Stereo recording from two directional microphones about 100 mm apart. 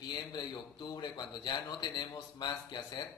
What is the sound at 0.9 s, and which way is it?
A man's voice, 45° left (ahead or behind).